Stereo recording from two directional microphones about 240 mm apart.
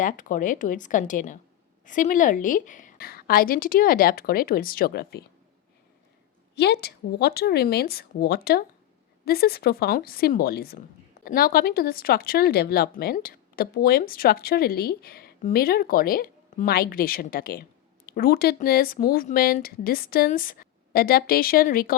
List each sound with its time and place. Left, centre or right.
0.0 s a woman's voice: left
6.6 s a woman's voice: left